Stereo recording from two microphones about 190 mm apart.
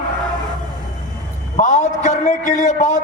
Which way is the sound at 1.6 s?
40° left (ahead or behind).